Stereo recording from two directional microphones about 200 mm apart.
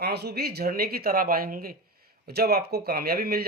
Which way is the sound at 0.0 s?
55° right (ahead or behind).